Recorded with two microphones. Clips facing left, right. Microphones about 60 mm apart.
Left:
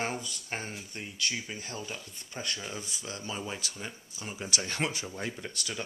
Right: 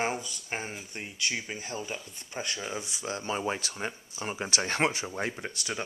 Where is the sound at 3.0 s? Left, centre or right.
Right.